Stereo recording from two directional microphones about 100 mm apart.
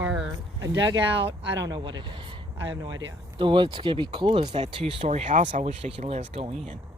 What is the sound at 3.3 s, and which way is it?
Speech, 55° right (ahead or behind).